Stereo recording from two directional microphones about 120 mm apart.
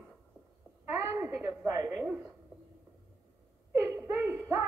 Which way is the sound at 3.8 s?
20° right (ahead or behind).